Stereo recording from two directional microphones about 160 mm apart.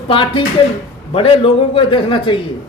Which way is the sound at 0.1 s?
30° left (ahead or behind).